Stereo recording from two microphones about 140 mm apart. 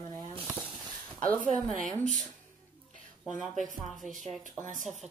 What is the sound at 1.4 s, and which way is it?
Speech, 65° right (ahead or behind).